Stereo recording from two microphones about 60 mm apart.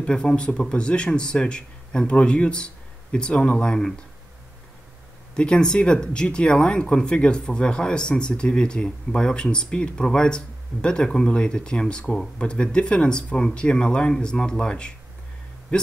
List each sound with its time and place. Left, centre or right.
0.0 s speech: centre
5.3 s speech: centre